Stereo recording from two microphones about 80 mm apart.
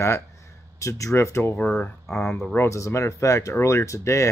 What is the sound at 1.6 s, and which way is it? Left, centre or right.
Speech, left.